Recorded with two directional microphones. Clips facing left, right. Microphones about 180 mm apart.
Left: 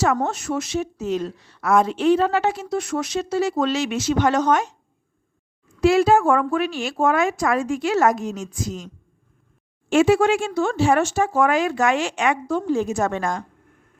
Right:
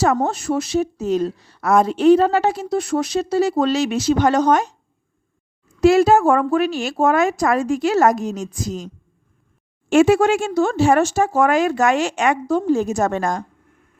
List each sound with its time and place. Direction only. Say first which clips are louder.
0.0 s speech: right 3 dB; 35° right (ahead or behind)
5.8 s speech: right 3 dB; 40° right (ahead or behind)
9.9 s speech: right 3 dB; 45° right (ahead or behind)